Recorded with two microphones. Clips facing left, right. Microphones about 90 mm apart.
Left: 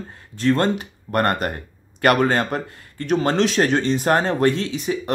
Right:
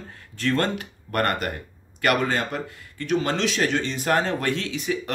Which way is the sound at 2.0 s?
45° left (ahead or behind).